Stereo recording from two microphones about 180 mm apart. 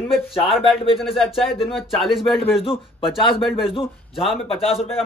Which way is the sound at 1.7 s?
Centre (ahead or behind).